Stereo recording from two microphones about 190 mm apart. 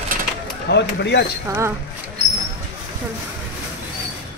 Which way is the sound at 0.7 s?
65° left (ahead or behind).